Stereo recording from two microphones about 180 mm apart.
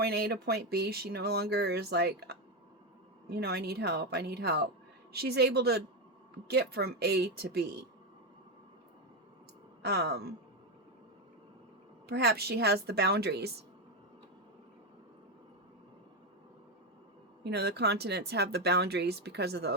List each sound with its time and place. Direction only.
0.0 s speech: 60° right (ahead or behind)
9.8 s speech: 65° right (ahead or behind)
12.0 s speech: 60° right (ahead or behind)
17.4 s speech: 65° right (ahead or behind)